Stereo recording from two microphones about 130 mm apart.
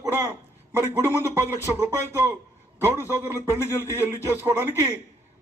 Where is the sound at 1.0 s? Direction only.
20° right (ahead or behind).